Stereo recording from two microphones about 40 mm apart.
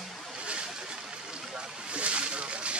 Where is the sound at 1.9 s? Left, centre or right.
Right.